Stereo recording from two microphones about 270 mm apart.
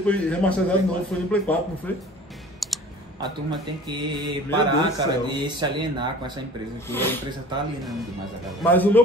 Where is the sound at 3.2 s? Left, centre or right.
Centre.